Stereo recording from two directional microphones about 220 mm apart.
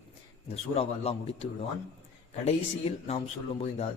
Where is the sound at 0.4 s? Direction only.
25° left (ahead or behind).